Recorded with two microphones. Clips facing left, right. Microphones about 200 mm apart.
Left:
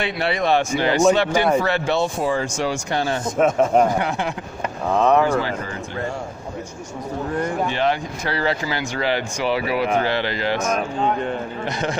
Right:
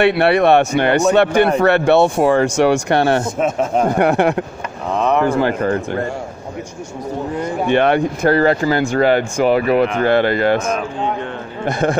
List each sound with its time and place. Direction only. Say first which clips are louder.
0.0 s a man's voice: right 10 dB; 65° right (ahead or behind)
7.6 s speech: right 7 dB; 60° right (ahead or behind)